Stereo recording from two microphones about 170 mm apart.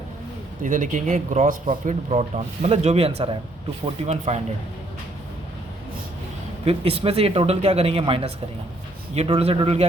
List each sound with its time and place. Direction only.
0.6 s speech: 50° right (ahead or behind)
6.7 s speech: 35° right (ahead or behind)